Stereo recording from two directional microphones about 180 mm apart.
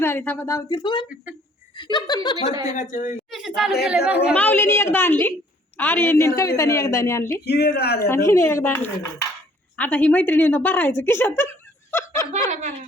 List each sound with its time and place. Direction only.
0.0 s a woman's voice: 10° left (ahead or behind)
2.5 s a woman's voice: 20° right (ahead or behind)
2.7 s a woman's voice: 45° left (ahead or behind)
3.3 s speech: centre (ahead or behind)
4.4 s a woman's voice: 10° left (ahead or behind)
7.4 s speech: 65° left (ahead or behind)
8.0 s a woman's voice: 15° left (ahead or behind)
11.9 s a sound: 15° left (ahead or behind)